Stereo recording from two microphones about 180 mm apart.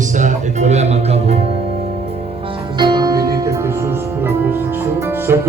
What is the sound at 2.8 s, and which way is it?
Music, 25° right (ahead or behind).